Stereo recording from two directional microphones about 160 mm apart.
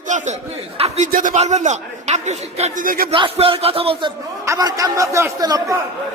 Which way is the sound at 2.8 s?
65° right (ahead or behind).